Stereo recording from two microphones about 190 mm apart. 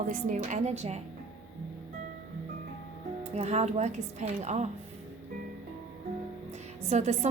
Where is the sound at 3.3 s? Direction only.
35° right (ahead or behind).